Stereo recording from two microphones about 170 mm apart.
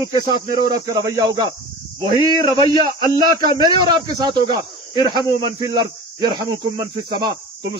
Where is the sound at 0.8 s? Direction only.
20° right (ahead or behind).